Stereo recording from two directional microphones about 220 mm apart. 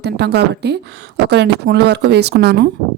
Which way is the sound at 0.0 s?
50° right (ahead or behind).